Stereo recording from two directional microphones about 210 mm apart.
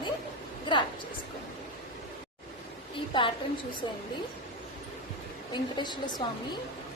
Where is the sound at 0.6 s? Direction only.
20° left (ahead or behind).